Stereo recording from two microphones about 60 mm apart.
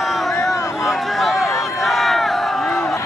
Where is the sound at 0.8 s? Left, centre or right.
Centre.